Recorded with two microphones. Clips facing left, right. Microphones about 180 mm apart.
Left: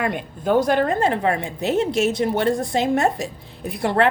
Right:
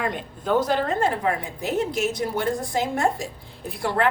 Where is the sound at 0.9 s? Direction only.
20° left (ahead or behind).